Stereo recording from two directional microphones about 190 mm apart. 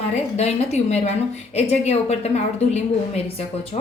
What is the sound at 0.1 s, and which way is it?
A woman's voice, 35° left (ahead or behind).